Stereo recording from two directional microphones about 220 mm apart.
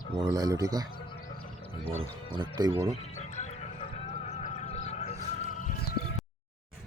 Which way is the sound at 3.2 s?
30° left (ahead or behind).